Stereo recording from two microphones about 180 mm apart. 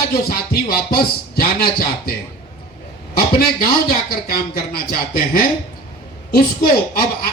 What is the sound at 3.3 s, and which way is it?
Speech, 55° left (ahead or behind).